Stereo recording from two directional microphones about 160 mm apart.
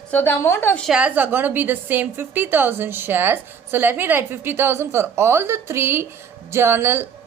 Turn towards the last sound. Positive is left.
turn(degrees=-15)  # may be behind; listen again after turning